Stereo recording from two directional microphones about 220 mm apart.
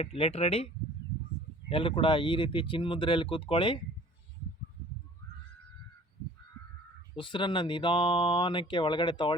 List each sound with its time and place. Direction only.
0.0 s speech: 25° left (ahead or behind)
1.7 s speech: 25° left (ahead or behind)
7.2 s speech: 20° left (ahead or behind)